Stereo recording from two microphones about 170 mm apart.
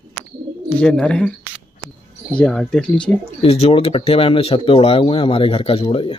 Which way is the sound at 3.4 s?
35° left (ahead or behind).